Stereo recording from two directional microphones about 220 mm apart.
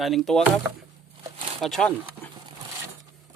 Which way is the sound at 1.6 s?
Centre (ahead or behind).